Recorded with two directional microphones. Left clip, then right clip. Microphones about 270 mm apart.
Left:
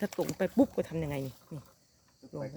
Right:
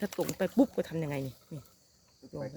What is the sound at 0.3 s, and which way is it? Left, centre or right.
Speech, centre.